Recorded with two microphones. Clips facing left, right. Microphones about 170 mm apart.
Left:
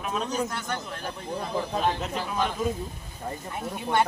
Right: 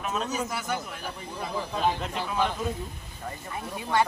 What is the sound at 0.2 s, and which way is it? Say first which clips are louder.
Speech: left 1 dB; 5° right (ahead or behind).